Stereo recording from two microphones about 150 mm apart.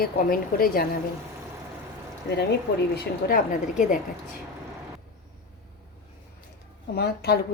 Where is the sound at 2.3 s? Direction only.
90° left.